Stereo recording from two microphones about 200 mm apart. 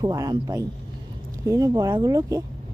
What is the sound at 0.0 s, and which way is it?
Speech, 20° right (ahead or behind).